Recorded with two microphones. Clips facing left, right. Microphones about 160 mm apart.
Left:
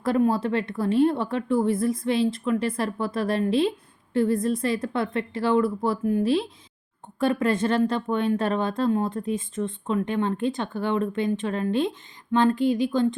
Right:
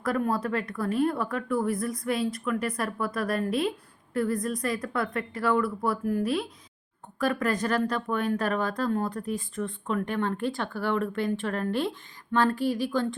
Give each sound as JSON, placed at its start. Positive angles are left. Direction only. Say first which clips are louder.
{"t": 0.0, "sound": "a woman's voice", "louder": "left 5 dB", "side_deg": 25}